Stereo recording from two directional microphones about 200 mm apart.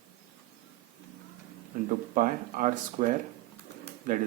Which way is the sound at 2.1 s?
40° right (ahead or behind).